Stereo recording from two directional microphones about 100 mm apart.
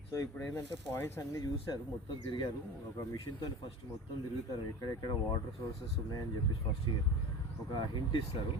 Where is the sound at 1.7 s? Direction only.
40° left (ahead or behind).